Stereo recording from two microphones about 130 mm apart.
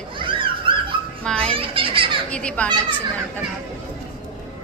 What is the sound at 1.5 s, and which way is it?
Speech, 45° right (ahead or behind).